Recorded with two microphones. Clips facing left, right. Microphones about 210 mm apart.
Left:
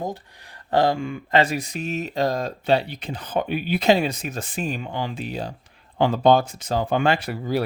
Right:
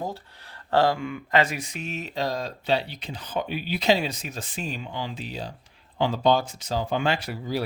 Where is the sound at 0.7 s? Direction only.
20° left (ahead or behind).